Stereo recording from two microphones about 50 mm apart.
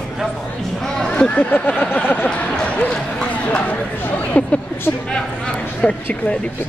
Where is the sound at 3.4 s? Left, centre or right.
Left.